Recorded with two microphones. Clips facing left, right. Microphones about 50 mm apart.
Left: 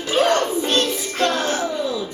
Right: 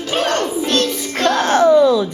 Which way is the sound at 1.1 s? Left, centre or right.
Right.